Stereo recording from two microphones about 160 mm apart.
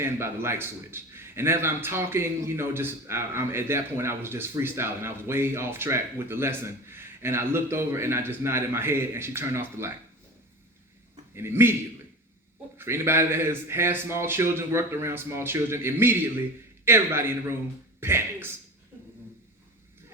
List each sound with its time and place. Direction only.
0.0 s a man's voice: 15° right (ahead or behind)
11.3 s a man's voice: 15° right (ahead or behind)
12.7 s a man's voice: 15° right (ahead or behind)